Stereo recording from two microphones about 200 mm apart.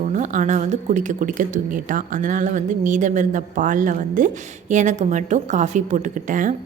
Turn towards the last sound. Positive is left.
turn(degrees=-40)  # may be behind; listen again after turning